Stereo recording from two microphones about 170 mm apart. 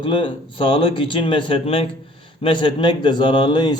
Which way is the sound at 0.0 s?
30° left (ahead or behind).